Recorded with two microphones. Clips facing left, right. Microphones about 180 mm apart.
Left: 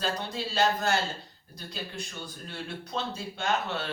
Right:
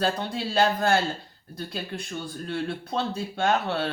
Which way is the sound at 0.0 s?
55° right (ahead or behind).